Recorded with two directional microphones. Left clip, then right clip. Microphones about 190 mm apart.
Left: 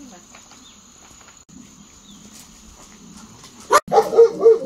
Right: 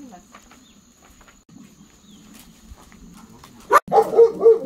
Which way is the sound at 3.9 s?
20° right (ahead or behind).